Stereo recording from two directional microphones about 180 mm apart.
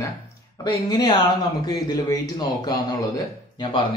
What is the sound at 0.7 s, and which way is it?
Speech, 25° left (ahead or behind).